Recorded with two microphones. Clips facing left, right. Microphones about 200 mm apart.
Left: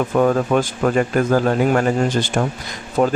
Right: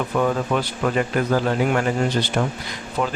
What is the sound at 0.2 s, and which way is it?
Speech, 45° left (ahead or behind).